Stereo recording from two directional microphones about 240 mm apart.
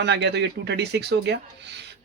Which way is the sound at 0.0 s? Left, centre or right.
Right.